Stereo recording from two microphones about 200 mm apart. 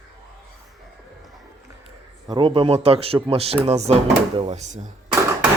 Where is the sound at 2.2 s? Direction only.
25° right (ahead or behind).